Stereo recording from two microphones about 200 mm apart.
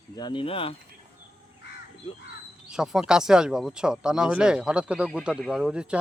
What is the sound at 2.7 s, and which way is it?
Speech, 5° right (ahead or behind).